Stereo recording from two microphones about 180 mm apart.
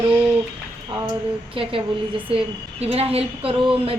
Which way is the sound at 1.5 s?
30° right (ahead or behind).